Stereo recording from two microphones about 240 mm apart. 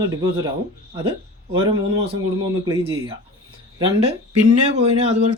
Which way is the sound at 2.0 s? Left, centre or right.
Centre.